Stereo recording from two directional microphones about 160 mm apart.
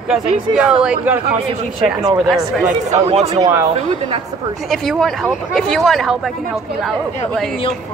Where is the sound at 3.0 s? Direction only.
40° right (ahead or behind).